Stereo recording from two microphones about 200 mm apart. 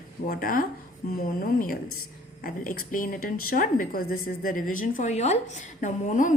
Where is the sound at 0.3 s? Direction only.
45° left (ahead or behind).